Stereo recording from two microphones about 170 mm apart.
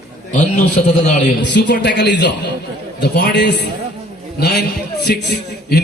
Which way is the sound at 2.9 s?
75° left (ahead or behind).